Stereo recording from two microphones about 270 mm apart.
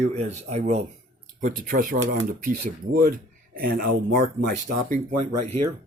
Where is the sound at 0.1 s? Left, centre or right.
Right.